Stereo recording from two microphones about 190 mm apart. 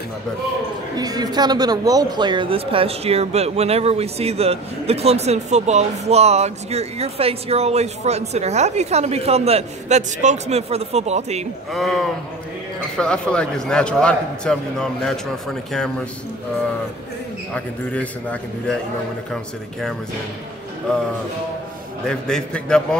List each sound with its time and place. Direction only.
0.9 s speech: 20° right (ahead or behind)
11.7 s a man's voice: centre (ahead or behind)
17.6 s a man's voice: 5° left (ahead or behind)
22.0 s a man's voice: 5° left (ahead or behind)